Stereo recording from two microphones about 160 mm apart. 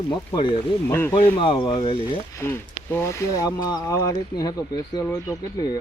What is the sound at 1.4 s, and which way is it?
Speech, 30° left (ahead or behind).